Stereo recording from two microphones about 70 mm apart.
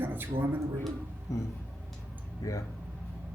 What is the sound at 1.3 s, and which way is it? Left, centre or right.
Speech, left.